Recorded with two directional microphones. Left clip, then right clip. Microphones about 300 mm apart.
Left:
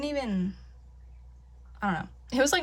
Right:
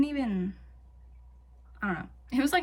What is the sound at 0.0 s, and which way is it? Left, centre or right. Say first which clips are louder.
Speech: right 1 dB; centre.